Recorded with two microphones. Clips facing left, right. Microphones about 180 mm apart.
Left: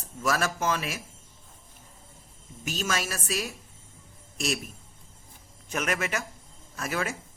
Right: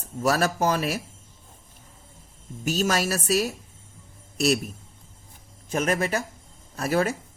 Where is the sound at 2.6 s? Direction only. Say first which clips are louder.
Right 7 dB; 40° right (ahead or behind).